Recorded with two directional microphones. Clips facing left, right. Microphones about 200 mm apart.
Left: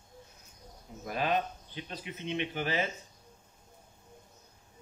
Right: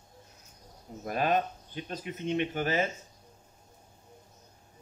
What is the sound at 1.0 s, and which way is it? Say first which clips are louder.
Speech: right 3 dB; 45° right (ahead or behind).